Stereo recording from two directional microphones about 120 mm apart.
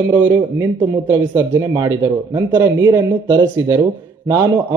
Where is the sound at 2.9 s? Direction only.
35° right (ahead or behind).